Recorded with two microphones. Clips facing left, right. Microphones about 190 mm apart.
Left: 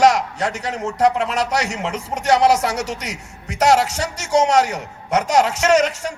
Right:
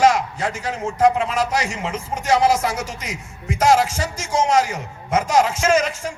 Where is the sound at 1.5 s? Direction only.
75° left (ahead or behind).